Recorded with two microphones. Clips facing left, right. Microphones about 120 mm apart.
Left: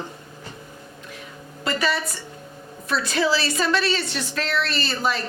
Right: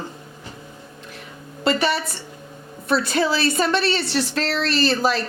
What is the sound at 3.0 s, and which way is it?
Speech, 50° right (ahead or behind).